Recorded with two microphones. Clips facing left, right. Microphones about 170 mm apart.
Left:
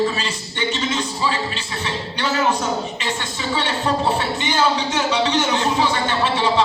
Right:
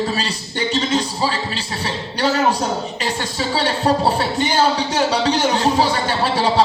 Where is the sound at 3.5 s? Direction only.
35° right (ahead or behind).